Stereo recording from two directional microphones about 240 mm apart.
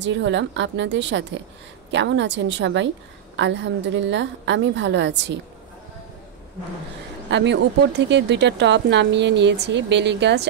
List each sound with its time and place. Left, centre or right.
0.0 s speech: right
7.2 s speech: right